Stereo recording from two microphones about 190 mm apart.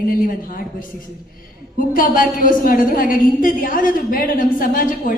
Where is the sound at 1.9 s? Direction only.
45° left (ahead or behind).